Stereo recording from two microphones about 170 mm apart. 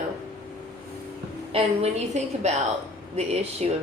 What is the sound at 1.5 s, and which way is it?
A woman's voice, 40° right (ahead or behind).